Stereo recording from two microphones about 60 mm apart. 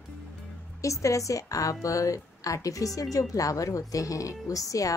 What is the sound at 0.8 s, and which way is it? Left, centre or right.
A woman's voice, left.